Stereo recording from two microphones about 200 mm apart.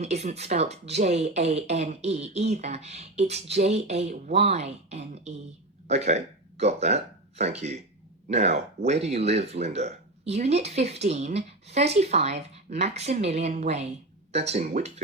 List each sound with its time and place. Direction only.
0.0 s speech: 35° right (ahead or behind)